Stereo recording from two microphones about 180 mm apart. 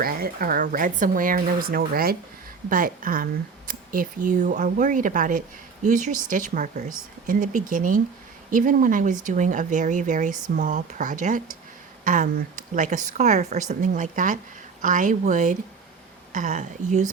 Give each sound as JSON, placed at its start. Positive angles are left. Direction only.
{"t": 0.0, "sound": "a woman's voice", "side_deg": -55}